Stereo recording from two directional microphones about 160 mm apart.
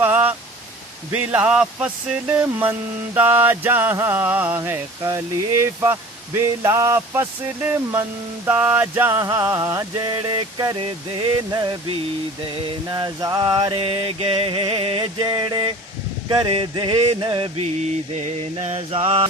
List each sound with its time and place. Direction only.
0.0 s a sound: 10° right (ahead or behind)
8.4 s music: 10° right (ahead or behind); by 11.9 s 30° right (ahead or behind)
12.6 s mantra: 25° right (ahead or behind)
16.3 s music: 30° right (ahead or behind)
18.1 s mantra: 40° right (ahead or behind)